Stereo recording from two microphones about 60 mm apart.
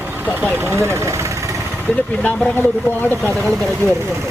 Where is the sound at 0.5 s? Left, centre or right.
Right.